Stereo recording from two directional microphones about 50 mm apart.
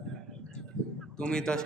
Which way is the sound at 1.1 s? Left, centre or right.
Centre.